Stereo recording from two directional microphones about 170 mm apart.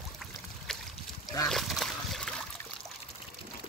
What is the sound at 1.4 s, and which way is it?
Splash, centre (ahead or behind).